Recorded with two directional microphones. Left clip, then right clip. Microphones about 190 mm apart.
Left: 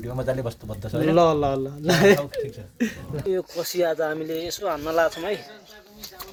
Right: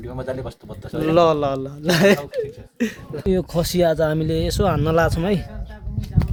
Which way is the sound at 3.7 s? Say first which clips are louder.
Right 5 dB; 55° right (ahead or behind).